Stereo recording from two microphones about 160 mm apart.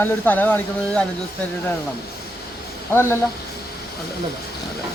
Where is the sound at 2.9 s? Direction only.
15° left (ahead or behind).